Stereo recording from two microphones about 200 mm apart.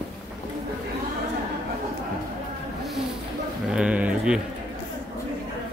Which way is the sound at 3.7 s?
5° right (ahead or behind).